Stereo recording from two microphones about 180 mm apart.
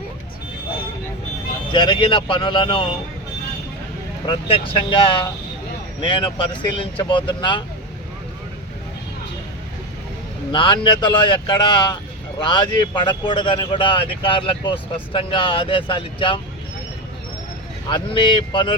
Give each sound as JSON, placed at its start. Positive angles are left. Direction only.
{"t": 1.7, "sound": "speech", "side_deg": 25}
{"t": 4.3, "sound": "speech", "side_deg": 30}
{"t": 10.5, "sound": "speech", "side_deg": 25}
{"t": 17.9, "sound": "speech", "side_deg": 25}